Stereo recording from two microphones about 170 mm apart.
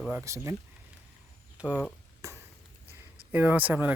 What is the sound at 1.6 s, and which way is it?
Speech, 5° right (ahead or behind).